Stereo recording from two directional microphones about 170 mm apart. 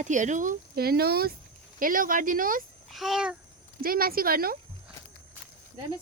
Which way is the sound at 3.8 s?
60° right (ahead or behind).